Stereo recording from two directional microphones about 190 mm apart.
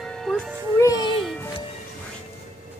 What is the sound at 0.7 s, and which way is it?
Music, 20° left (ahead or behind).